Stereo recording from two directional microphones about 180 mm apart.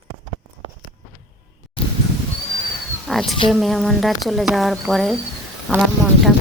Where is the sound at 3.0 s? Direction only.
Centre (ahead or behind).